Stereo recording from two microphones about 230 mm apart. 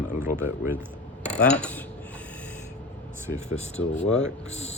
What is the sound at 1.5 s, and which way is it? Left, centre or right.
Speech, centre.